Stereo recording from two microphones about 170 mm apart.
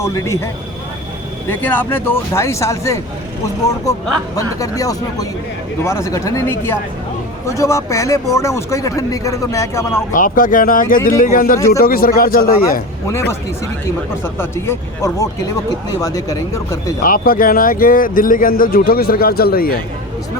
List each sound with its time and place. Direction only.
0.0 s speech: 15° left (ahead or behind)
4.4 s speech: 20° left (ahead or behind)
10.1 s speech: 50° left (ahead or behind)
14.3 s speech: 15° left (ahead or behind)
17.0 s speech: 55° left (ahead or behind)